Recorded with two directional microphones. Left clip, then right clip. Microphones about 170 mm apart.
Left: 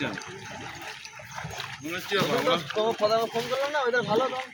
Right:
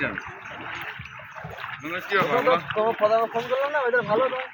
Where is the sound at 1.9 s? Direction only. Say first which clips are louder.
Right 4 dB; 25° left (ahead or behind).